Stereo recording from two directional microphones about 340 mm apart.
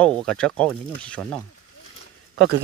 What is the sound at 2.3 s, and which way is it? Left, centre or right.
Speech, right.